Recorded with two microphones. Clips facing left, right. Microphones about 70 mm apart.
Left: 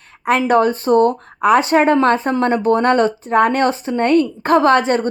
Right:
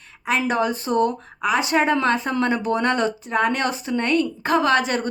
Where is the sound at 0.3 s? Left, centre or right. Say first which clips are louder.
Left 7 dB; left.